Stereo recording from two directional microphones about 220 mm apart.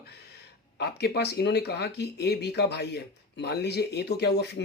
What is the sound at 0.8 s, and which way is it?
Speech, 50° left (ahead or behind).